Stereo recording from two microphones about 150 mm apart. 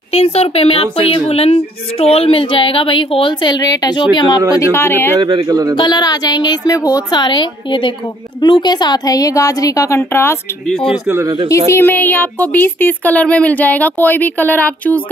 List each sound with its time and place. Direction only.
0.1 s speech: 40° left (ahead or behind)
4.6 s speech: 15° left (ahead or behind)
5.2 s speech: 25° right (ahead or behind)
5.8 s a woman's voice: 30° left (ahead or behind)
11.1 s speech: 15° right (ahead or behind)
11.4 s speech: 20° left (ahead or behind)